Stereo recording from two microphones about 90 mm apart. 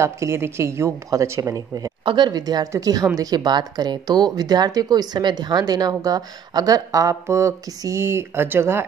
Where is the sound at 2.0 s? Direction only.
55° right (ahead or behind).